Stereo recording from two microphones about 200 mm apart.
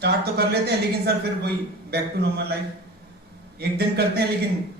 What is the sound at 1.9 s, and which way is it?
Speech, 55° right (ahead or behind).